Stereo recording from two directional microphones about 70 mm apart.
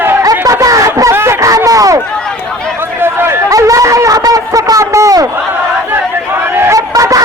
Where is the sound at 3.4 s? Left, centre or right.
Right.